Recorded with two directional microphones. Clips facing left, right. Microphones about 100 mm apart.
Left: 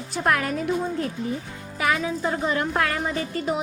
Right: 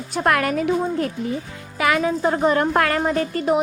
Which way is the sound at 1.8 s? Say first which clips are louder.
Right 4 dB; 90° right.